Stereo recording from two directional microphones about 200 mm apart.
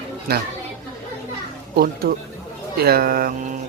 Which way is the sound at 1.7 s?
50° right (ahead or behind).